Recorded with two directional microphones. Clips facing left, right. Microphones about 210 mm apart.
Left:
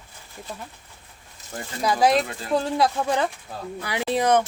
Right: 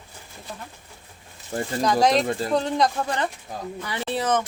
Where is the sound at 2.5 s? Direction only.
5° left (ahead or behind).